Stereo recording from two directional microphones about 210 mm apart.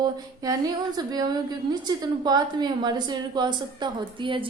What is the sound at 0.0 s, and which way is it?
A woman's voice, 20° right (ahead or behind).